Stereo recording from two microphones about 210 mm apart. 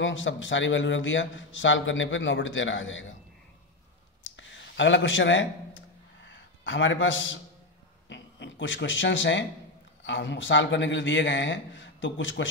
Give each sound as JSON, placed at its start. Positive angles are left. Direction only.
{"t": 0.0, "sound": "a man's voice", "side_deg": 65}
{"t": 4.2, "sound": "a sound", "side_deg": 60}
{"t": 8.1, "sound": "a man's voice", "side_deg": 60}